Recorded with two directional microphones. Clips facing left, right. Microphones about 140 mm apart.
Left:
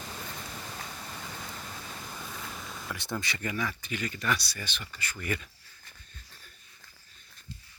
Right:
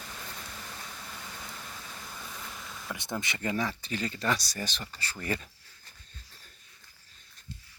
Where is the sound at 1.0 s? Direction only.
20° left (ahead or behind).